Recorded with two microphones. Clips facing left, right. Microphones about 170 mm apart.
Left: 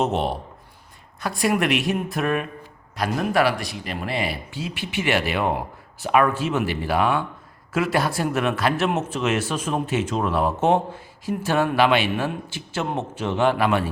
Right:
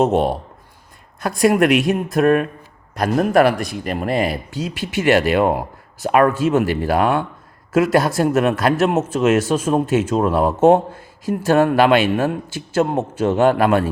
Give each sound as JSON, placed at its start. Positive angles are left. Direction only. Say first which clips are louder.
{"t": 0.0, "sound": "speech", "louder": "right 6 dB", "side_deg": -50}